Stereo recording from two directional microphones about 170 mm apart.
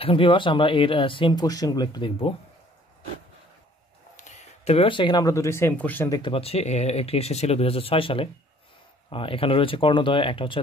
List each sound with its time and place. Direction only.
0.0 s speech: 30° left (ahead or behind)
4.2 s speech: 45° left (ahead or behind); by 6.3 s 20° left (ahead or behind)
6.3 s speech: 35° left (ahead or behind)